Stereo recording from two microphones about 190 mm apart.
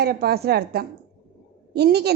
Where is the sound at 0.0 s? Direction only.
55° right (ahead or behind).